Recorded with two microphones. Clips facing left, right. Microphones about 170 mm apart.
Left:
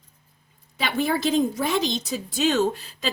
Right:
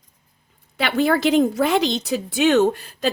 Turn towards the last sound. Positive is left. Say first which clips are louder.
# right 5 dB
turn(degrees=-55)  # may be behind; listen again after turning